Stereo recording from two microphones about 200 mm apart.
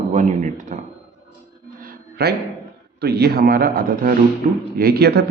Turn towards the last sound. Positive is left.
turn(degrees=-55)  # may be behind; listen again after turning